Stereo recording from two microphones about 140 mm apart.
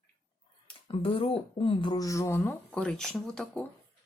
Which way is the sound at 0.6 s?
40° left (ahead or behind).